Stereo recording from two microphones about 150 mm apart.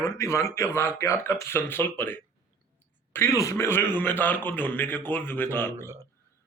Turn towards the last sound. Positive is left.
turn(degrees=15)  # may be behind; listen again after turning